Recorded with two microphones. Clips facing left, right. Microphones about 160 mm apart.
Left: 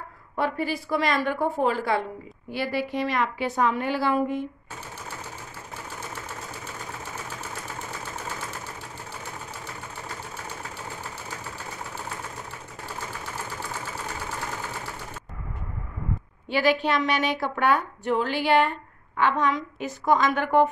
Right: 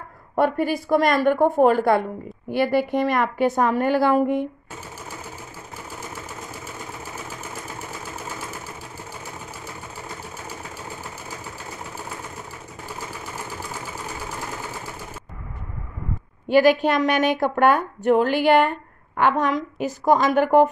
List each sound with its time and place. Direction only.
0.4 s a woman's voice: 50° right (ahead or behind)
16.4 s a woman's voice: 45° right (ahead or behind)